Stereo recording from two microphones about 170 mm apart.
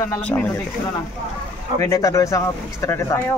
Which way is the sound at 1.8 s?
20° left (ahead or behind).